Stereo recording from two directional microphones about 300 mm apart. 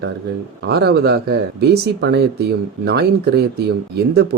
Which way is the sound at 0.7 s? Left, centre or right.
Right.